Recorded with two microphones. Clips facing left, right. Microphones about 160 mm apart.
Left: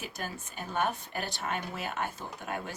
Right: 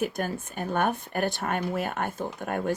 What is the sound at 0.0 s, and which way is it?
Speech, 55° right (ahead or behind).